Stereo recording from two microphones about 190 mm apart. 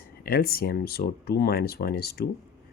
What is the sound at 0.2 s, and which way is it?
Speech, 50° left (ahead or behind).